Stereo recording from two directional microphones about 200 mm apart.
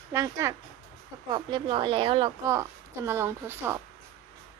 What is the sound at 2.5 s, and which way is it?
A woman's voice, 15° right (ahead or behind).